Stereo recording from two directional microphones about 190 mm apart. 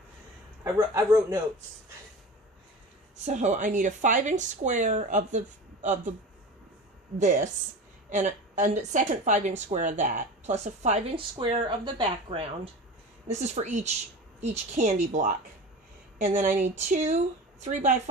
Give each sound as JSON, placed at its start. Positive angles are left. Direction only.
{"t": 0.6, "sound": "a man's voice", "side_deg": -15}
{"t": 3.2, "sound": "speech", "side_deg": -40}
{"t": 7.2, "sound": "speech", "side_deg": -45}